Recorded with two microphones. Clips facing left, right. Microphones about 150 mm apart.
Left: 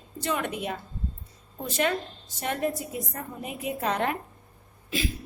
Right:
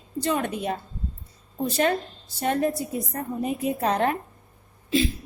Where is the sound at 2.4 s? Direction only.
35° right (ahead or behind).